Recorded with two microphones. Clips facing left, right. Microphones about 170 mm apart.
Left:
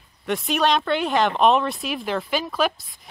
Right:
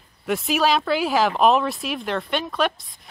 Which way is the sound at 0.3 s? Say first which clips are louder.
Right 1 dB; 5° right (ahead or behind).